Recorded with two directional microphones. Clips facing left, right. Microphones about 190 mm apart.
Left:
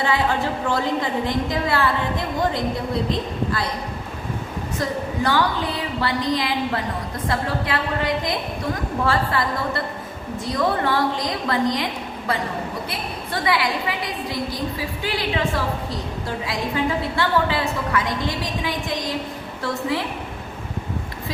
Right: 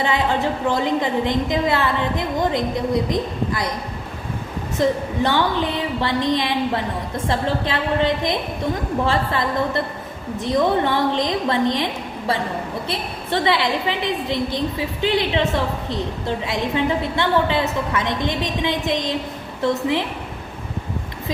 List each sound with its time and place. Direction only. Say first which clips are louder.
0.0 s a woman's voice: right 1 dB; 20° right (ahead or behind)
4.8 s a woman's voice: right 5 dB; 25° right (ahead or behind)
12.9 s a woman's voice: right 4 dB; 25° right (ahead or behind)